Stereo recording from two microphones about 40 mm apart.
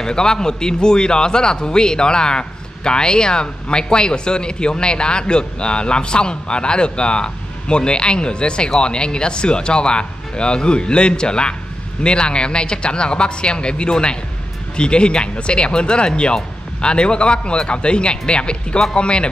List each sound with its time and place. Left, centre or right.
0.0 s a man's voice: centre